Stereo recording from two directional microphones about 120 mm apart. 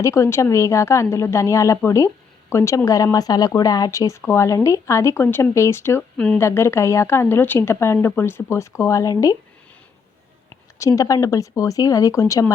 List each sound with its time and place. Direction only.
0.0 s speech: 25° left (ahead or behind)
6.0 s speech: 10° left (ahead or behind)
6.4 s speech: 20° left (ahead or behind)
10.8 s speech: 25° left (ahead or behind)